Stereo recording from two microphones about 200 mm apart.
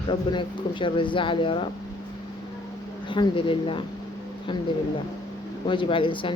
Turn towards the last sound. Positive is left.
turn(degrees=25)  # may be behind; listen again after turning